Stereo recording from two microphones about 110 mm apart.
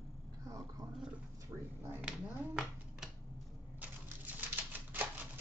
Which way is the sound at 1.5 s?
15° right (ahead or behind).